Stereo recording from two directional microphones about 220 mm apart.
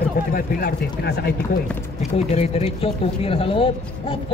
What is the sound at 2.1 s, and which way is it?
Speech, 30° left (ahead or behind).